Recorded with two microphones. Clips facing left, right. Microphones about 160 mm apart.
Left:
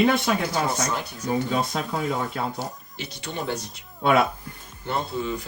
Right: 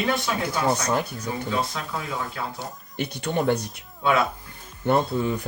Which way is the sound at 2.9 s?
55° right (ahead or behind).